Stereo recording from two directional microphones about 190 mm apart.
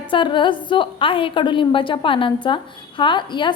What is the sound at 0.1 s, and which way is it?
A woman's voice, 25° left (ahead or behind).